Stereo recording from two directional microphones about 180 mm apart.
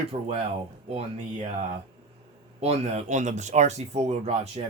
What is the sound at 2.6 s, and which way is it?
Speech, 35° right (ahead or behind).